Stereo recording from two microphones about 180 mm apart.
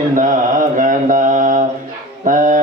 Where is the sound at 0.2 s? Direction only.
45° right (ahead or behind).